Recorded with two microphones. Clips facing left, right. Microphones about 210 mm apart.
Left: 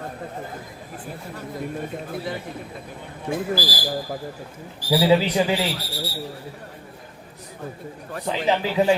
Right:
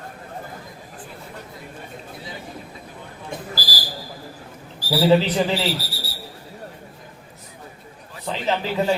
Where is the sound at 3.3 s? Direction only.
55° left (ahead or behind).